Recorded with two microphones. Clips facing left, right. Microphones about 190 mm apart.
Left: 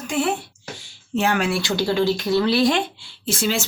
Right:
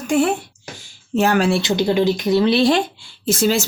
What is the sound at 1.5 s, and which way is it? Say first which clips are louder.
Speech: right 4 dB; 20° right (ahead or behind).